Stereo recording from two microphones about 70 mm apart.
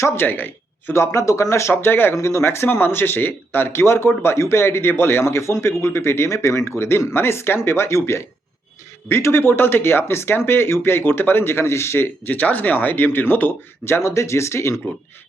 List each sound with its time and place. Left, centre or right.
0.2 s speech: left
0.9 s speech: left
1.7 s speech: left
14.0 s speech: left